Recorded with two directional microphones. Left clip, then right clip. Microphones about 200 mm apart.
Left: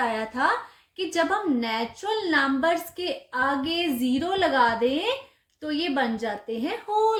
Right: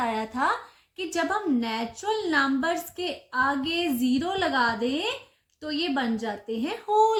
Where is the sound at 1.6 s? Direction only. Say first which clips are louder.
Left 2 dB; 35° right (ahead or behind).